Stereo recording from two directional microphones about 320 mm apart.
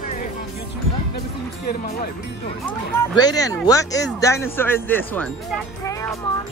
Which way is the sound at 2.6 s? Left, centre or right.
Centre.